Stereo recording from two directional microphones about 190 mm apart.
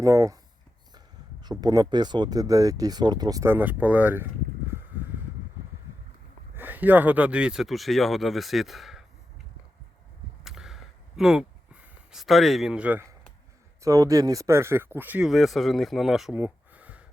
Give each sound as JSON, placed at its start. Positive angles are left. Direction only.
{"t": 0.0, "sound": "speech", "side_deg": -15}
{"t": 4.7, "sound": "a sound", "side_deg": -10}
{"t": 6.6, "sound": "speech", "side_deg": -10}
{"t": 10.4, "sound": "whip", "side_deg": -5}
{"t": 11.2, "sound": "speech", "side_deg": -5}